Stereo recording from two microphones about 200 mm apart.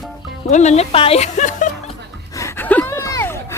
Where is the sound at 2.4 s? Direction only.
10° left (ahead or behind).